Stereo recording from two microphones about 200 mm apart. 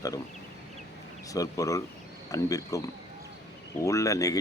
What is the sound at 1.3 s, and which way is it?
Speech, 15° left (ahead or behind).